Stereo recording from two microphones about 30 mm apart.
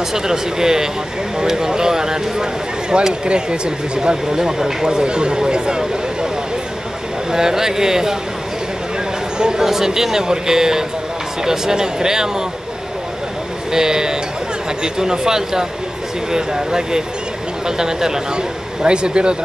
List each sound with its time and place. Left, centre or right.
0.1 s speech: centre
4.8 s speech: right
7.2 s speech: centre
9.6 s speech: centre
13.7 s speech: right
18.8 s speech: right